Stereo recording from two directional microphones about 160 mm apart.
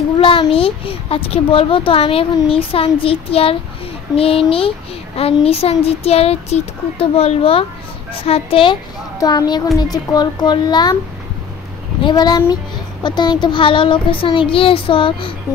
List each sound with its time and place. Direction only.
0.2 s a child's voice: 35° left (ahead or behind)
12.0 s a child's voice: 25° left (ahead or behind)